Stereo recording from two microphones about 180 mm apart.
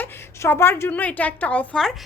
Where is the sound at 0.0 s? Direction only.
15° left (ahead or behind).